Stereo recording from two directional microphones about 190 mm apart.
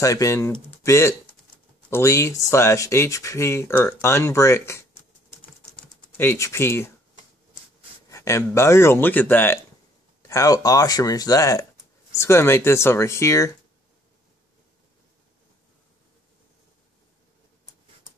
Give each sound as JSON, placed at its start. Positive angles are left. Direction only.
{"t": 0.0, "sound": "speech", "side_deg": 15}
{"t": 5.4, "sound": "typing", "side_deg": 10}
{"t": 8.1, "sound": "speech", "side_deg": 15}